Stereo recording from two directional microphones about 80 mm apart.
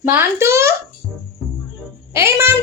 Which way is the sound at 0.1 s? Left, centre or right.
Right.